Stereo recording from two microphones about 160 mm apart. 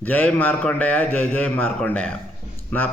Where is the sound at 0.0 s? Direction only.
10° left (ahead or behind).